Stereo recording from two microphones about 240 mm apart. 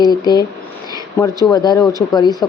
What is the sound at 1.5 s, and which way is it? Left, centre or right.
Speech, centre.